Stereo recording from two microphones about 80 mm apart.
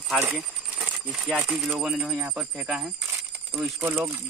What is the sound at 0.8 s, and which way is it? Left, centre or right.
Coin, centre.